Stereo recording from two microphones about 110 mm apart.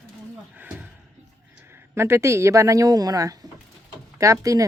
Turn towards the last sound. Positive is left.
turn(degrees=-30)  # may be behind; listen again after turning